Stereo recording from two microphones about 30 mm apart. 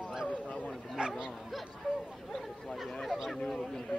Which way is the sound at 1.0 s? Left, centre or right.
Right.